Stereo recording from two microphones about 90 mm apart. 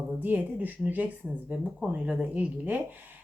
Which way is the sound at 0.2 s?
20° right (ahead or behind).